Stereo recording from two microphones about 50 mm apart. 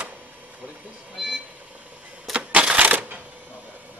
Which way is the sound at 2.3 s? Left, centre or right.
Right.